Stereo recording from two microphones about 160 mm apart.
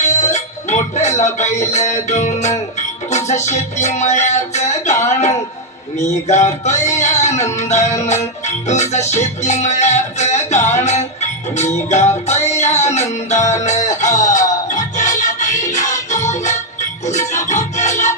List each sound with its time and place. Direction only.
0.2 s music: 45° left (ahead or behind)
0.9 s speech: 45° left (ahead or behind)
1.7 s music: 45° left (ahead or behind)
6.8 s speech: 45° left (ahead or behind)
7.7 s music: 45° left (ahead or behind)